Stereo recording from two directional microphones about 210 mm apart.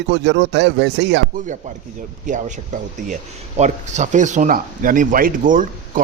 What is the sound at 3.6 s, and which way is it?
Speech, 35° right (ahead or behind).